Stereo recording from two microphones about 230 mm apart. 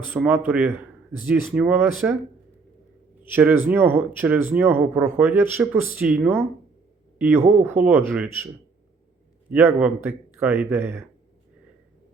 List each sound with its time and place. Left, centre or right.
0.1 s speech: centre
3.7 s speech: centre
9.5 s speech: centre